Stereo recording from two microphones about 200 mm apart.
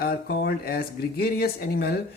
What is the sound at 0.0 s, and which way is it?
Speech, 50° left (ahead or behind).